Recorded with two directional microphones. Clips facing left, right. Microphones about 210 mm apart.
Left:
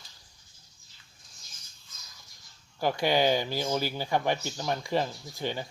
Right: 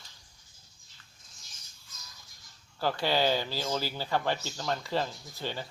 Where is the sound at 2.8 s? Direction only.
15° left (ahead or behind).